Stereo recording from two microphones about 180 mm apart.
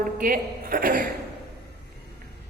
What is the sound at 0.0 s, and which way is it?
A man's voice, 50° right (ahead or behind).